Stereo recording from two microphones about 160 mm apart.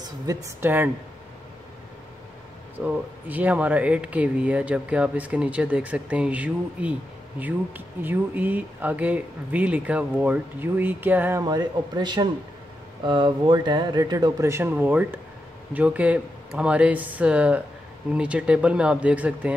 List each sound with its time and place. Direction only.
0.0 s speech: 20° right (ahead or behind)
2.8 s speech: 10° right (ahead or behind)
11.4 s speech: 25° right (ahead or behind); by 19.5 s 10° right (ahead or behind)